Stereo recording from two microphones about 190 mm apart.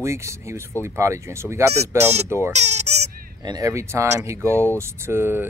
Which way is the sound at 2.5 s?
35° right (ahead or behind).